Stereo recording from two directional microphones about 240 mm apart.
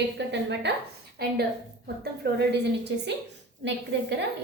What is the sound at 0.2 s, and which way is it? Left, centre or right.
A woman's voice, right.